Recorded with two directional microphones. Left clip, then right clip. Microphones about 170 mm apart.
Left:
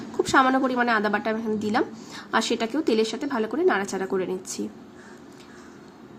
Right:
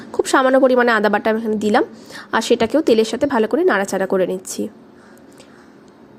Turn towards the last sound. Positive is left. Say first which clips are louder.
# right 9 dB
turn(degrees=-40)  # may be behind; listen again after turning